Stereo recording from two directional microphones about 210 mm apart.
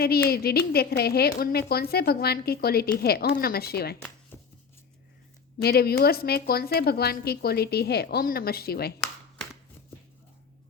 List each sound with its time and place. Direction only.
0.3 s a woman's voice: 50° left (ahead or behind)
4.3 s shuffling cards: 10° left (ahead or behind)
5.6 s a woman's voice: 50° left (ahead or behind)